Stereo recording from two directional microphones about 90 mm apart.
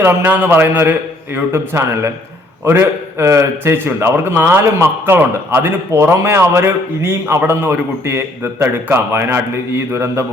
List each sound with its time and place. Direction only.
0.1 s a man's voice: 20° right (ahead or behind)